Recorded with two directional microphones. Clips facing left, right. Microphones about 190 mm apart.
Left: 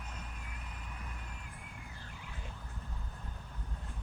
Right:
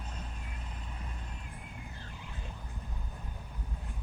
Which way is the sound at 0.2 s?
30° right (ahead or behind).